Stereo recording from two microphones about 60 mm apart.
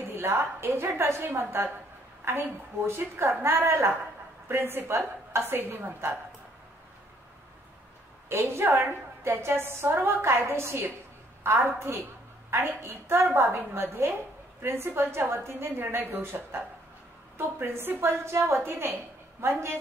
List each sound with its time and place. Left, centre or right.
0.1 s a woman's voice: right
8.3 s a woman's voice: right
10.2 s a woman's voice: right
12.6 s a woman's voice: right